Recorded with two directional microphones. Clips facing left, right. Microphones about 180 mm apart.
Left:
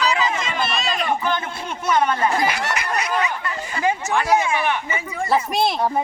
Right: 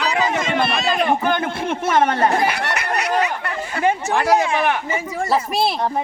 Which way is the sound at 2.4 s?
60° right (ahead or behind).